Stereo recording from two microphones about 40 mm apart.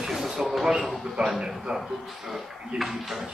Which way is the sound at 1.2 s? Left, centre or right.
Right.